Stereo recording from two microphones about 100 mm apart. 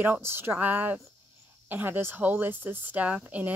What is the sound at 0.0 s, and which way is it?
Speech, 20° right (ahead or behind).